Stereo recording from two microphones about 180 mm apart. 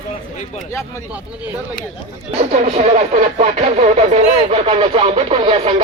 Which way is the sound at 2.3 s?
35° right (ahead or behind).